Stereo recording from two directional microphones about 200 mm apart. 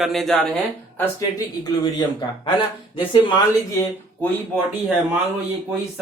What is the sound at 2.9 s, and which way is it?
Speech, 25° left (ahead or behind).